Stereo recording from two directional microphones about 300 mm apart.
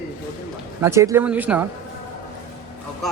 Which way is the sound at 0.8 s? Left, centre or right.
Centre.